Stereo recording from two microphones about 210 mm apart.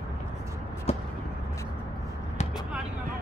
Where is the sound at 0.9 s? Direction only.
30° left (ahead or behind).